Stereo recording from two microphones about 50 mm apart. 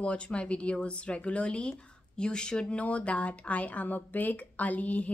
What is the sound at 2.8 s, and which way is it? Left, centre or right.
Speech, left.